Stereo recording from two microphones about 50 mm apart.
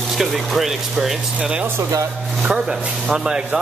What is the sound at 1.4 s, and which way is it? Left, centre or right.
Speech, centre.